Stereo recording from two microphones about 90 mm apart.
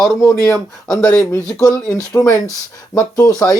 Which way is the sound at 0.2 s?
35° left (ahead or behind).